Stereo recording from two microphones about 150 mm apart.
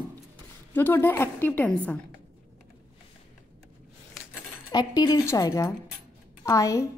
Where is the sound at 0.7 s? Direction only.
15° left (ahead or behind).